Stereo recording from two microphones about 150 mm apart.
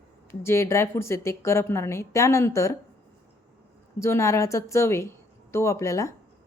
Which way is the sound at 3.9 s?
20° left (ahead or behind).